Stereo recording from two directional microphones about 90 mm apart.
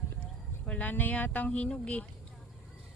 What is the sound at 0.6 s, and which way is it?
Speech, 20° left (ahead or behind).